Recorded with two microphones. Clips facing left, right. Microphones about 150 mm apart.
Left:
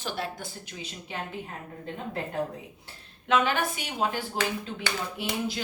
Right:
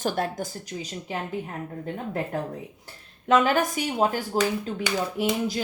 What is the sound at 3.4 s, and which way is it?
A woman's voice, 40° right (ahead or behind).